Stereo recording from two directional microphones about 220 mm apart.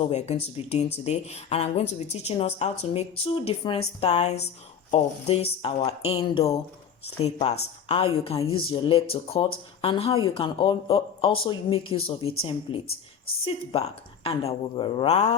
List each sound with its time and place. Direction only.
0.0 s speech: 30° left (ahead or behind)